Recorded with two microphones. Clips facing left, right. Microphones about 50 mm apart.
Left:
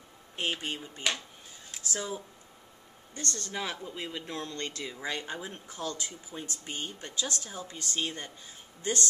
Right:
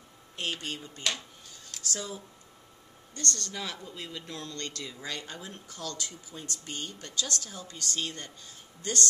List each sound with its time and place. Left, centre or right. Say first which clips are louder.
0.4 s speech: left 2 dB; centre